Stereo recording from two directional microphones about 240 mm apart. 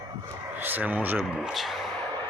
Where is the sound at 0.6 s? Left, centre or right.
Centre.